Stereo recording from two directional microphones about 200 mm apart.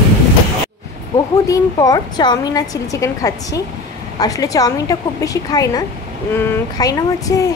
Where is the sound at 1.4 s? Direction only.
15° left (ahead or behind).